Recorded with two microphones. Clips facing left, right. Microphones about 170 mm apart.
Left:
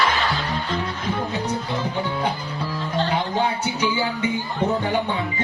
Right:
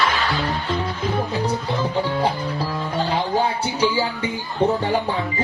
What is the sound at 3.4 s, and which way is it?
Music, 30° right (ahead or behind).